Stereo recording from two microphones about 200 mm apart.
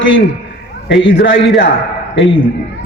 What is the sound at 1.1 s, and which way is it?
Speech, 65° left (ahead or behind).